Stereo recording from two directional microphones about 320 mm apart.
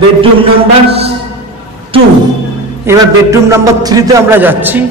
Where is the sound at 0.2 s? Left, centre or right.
Centre.